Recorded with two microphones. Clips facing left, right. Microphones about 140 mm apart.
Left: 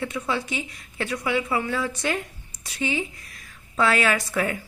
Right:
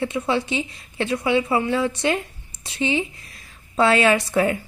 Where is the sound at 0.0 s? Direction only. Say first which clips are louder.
Right 5 dB; 25° right (ahead or behind).